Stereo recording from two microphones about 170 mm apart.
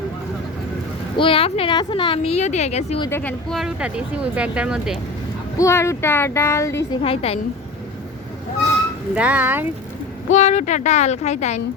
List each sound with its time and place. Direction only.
1.1 s a woman's voice: 30° left (ahead or behind)
3.1 s speech: 10° left (ahead or behind)
3.6 s speech: 5° right (ahead or behind)
5.5 s speech: 15° left (ahead or behind)
7.0 s a woman's voice: 35° left (ahead or behind)
9.1 s speech: 10° right (ahead or behind)
10.3 s speech: 45° left (ahead or behind)